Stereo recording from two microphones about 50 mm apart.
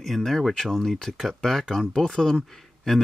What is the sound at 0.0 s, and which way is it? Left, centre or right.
Speech, centre.